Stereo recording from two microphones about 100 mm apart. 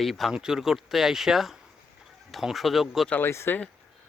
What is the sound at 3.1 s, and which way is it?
Speech, 25° left (ahead or behind).